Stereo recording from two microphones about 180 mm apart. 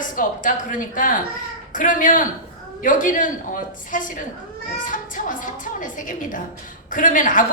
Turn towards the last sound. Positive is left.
turn(degrees=45)  # may be behind; listen again after turning